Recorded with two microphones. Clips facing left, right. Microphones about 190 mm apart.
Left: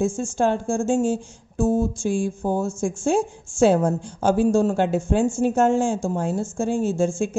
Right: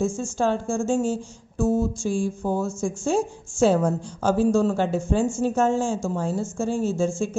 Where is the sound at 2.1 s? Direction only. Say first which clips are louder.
Even; 25° left (ahead or behind).